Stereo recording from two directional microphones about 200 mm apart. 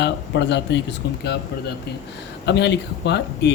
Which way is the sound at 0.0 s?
60° left (ahead or behind).